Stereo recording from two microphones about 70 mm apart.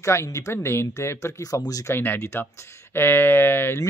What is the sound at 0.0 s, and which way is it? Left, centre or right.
Speech, left.